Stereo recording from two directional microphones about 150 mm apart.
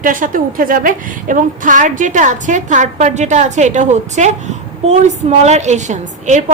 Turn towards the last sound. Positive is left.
turn(degrees=-55)  # may be behind; listen again after turning